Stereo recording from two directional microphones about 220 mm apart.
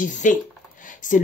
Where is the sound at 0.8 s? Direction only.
35° left (ahead or behind).